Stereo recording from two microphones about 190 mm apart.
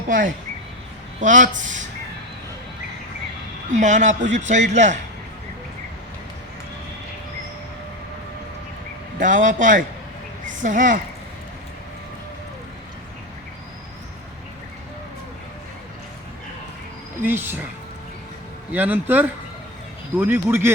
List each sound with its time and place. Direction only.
1.2 s a man's voice: 40° right (ahead or behind)
3.7 s a man's voice: 40° right (ahead or behind)
9.1 s a man's voice: 45° right (ahead or behind)
17.2 s speech: 10° right (ahead or behind)
18.7 s speech: 10° right (ahead or behind)